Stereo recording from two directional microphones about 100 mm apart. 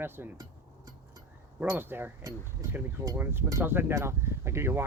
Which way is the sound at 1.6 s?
20° right (ahead or behind).